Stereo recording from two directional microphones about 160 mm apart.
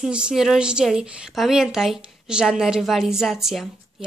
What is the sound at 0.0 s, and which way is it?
A woman's voice, 5° right (ahead or behind).